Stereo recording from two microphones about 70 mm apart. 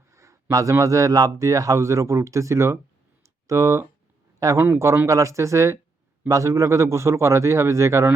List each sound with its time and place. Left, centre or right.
0.1 s a sound: right
0.5 s speech: right
4.4 s speech: right